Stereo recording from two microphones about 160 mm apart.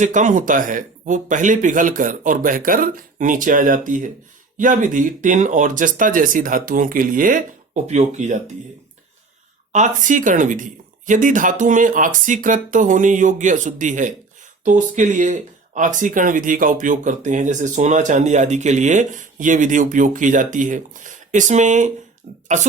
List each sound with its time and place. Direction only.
0.0 s speech: 50° right (ahead or behind)
9.7 s speech: 50° right (ahead or behind)